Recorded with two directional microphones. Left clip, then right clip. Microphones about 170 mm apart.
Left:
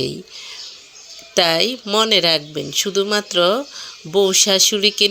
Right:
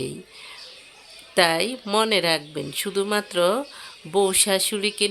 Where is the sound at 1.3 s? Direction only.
15° left (ahead or behind).